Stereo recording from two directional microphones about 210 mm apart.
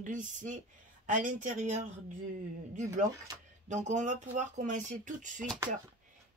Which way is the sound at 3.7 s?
35° right (ahead or behind).